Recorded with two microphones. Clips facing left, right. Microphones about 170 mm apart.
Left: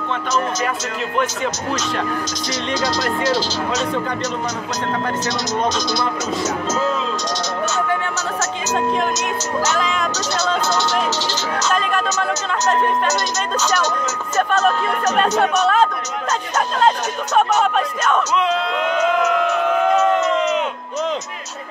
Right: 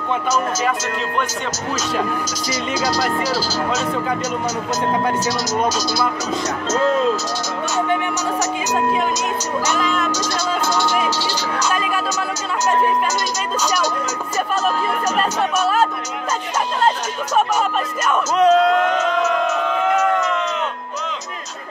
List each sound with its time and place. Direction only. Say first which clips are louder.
0.3 s speech: right 1 dB; centre (ahead or behind)
2.5 s speech: right 1 dB; 5° right (ahead or behind)
5.2 s speech: right 1 dB; 10° right (ahead or behind)
9.8 s speech: right 1 dB; centre (ahead or behind)
15.1 s speech: left 5 dB; 5° right (ahead or behind)
17.7 s speech: left 2 dB; 10° right (ahead or behind)
18.3 s speech: right 6 dB; 45° right (ahead or behind)
20.0 s crowd: left 2 dB; 20° left (ahead or behind)